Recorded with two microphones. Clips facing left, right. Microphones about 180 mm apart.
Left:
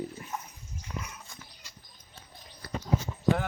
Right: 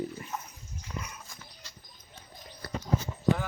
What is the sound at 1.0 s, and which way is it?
Dog, centre (ahead or behind).